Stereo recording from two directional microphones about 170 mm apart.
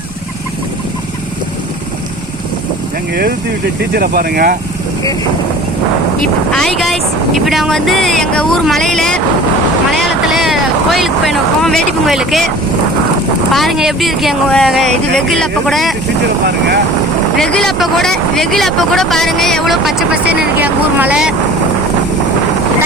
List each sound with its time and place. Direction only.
3.9 s speech: 60° right (ahead or behind)
6.5 s speech: 5° left (ahead or behind)
13.5 s speech: centre (ahead or behind)
17.3 s speech: 5° left (ahead or behind)